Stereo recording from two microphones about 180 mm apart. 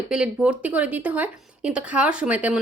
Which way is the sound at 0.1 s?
5° right (ahead or behind).